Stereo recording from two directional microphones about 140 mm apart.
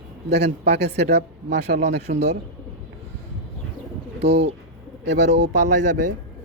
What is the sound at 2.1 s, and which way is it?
Speech, 60° right (ahead or behind).